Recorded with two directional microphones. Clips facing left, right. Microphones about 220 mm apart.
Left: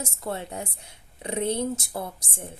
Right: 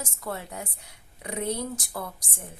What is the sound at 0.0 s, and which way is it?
A woman's voice, 25° left (ahead or behind).